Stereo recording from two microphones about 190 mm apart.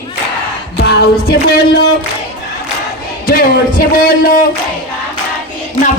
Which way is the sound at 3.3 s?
50° left (ahead or behind).